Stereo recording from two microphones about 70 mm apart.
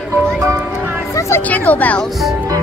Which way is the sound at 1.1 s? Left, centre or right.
Left.